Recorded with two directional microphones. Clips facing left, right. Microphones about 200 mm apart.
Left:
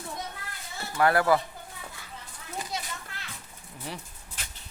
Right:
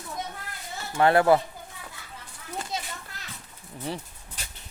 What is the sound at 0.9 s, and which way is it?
Speech, 25° right (ahead or behind).